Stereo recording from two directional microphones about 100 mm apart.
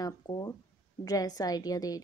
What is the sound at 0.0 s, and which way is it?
A woman's voice, 40° left (ahead or behind).